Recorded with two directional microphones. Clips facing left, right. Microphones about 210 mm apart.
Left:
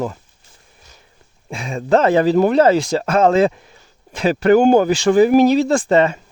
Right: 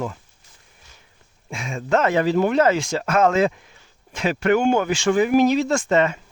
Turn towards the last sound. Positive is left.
turn(degrees=35)  # may be behind; listen again after turning